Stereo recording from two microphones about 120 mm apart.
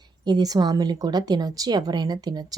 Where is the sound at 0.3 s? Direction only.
35° right (ahead or behind).